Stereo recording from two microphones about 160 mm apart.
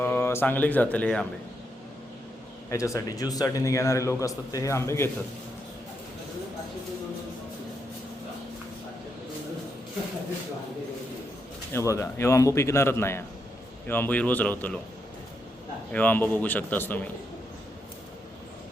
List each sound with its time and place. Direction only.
0.0 s a man's voice: 15° left (ahead or behind)
2.6 s a man's voice: 20° left (ahead or behind)
11.7 s a man's voice: 20° left (ahead or behind)
15.9 s a man's voice: 10° left (ahead or behind)